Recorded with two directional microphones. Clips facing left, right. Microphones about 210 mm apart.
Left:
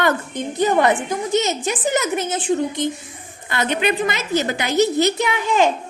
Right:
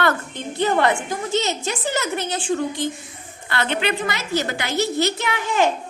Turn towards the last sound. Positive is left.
turn(degrees=20)  # may be behind; listen again after turning